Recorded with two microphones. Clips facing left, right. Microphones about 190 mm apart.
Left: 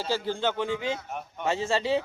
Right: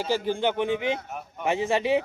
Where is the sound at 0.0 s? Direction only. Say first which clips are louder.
Right 3 dB; 15° right (ahead or behind).